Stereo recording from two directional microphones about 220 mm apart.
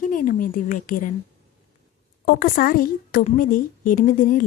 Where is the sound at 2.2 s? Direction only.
40° left (ahead or behind).